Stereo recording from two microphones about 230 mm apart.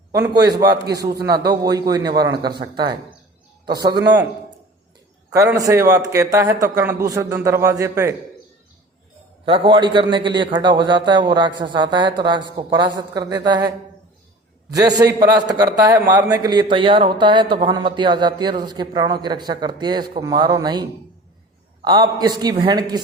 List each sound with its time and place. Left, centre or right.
0.1 s a man's voice: centre
5.3 s a man's voice: centre
9.5 s a man's voice: right
14.8 s a man's voice: centre